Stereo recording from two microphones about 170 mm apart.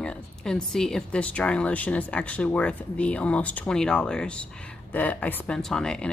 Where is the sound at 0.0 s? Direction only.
5° left (ahead or behind).